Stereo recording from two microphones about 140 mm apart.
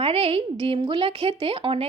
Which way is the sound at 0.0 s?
45° right (ahead or behind).